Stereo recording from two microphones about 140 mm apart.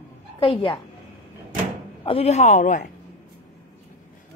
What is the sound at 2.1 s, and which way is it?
Speech, 45° left (ahead or behind).